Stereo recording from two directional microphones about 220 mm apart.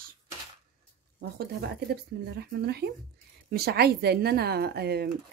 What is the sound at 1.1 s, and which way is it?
Speech, 45° right (ahead or behind).